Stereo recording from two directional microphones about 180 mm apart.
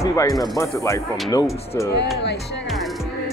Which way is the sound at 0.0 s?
20° left (ahead or behind).